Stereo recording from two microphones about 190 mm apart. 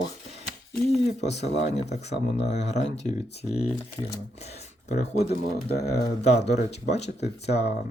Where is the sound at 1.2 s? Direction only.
35° left (ahead or behind).